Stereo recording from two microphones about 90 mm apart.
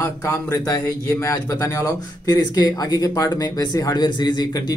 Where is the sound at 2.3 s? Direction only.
50° left (ahead or behind).